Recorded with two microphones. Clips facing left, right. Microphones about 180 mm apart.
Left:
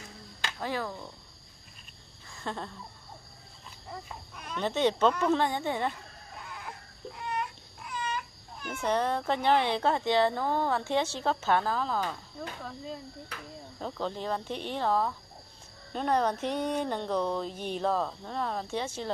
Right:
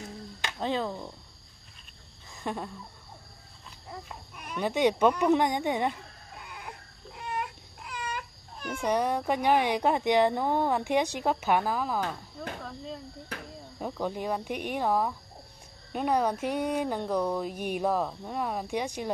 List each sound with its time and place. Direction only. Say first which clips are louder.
0.4 s speech: right 3 dB; 20° right (ahead or behind)
2.3 s a sound: right 3 dB; 15° right (ahead or behind)
3.9 s speech: even; 10° right (ahead or behind)
6.4 s baby cry: even; 20° right (ahead or behind)
8.7 s speech: right 1 dB; 10° right (ahead or behind)
12.4 s speech: right 1 dB; centre (ahead or behind)
13.7 s speech: right 2 dB; 10° right (ahead or behind)